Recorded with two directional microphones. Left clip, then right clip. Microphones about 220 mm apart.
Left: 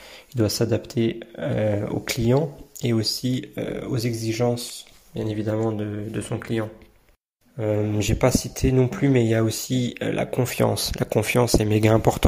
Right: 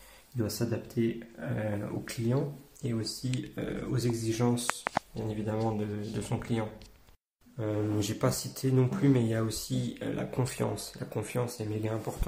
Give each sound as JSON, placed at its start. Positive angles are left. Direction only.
{"t": 0.4, "sound": "speech", "side_deg": 40}
{"t": 7.5, "sound": "speech", "side_deg": 30}